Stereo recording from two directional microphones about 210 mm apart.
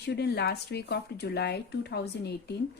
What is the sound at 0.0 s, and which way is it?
Speech, 50° left (ahead or behind).